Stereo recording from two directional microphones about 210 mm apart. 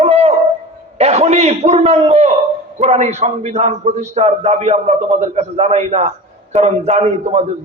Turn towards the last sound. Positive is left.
turn(degrees=-30)  # may be behind; listen again after turning